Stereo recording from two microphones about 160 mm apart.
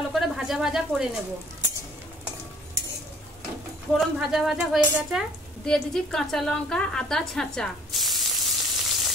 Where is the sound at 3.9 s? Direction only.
Centre (ahead or behind).